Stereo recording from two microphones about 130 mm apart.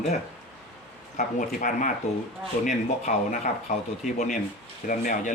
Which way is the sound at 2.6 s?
65° left (ahead or behind).